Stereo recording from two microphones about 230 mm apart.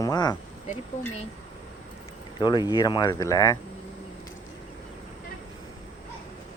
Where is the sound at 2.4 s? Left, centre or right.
Centre.